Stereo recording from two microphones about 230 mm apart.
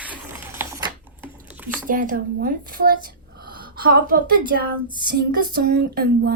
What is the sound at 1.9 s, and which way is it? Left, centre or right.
Speech, right.